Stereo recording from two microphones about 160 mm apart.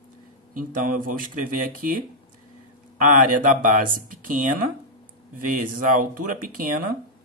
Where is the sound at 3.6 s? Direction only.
55° right (ahead or behind).